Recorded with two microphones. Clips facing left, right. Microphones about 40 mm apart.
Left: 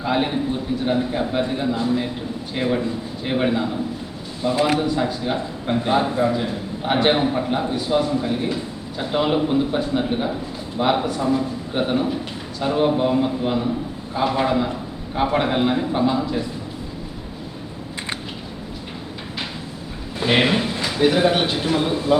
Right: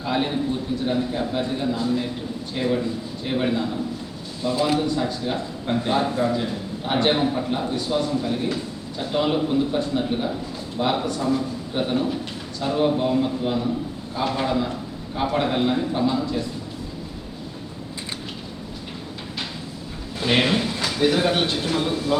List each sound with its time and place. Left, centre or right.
0.0 s a man's voice: centre
4.4 s speech: left
4.8 s a man's voice: centre
20.1 s a sound: centre
20.8 s a man's voice: centre